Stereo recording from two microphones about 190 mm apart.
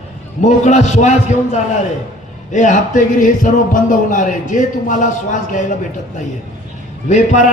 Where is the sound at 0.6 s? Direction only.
35° left (ahead or behind).